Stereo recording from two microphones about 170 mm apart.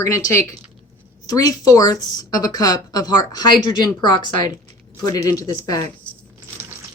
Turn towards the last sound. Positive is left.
turn(degrees=20)  # may be behind; listen again after turning